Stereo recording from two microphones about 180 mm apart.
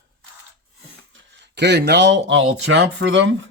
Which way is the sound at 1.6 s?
70° right (ahead or behind).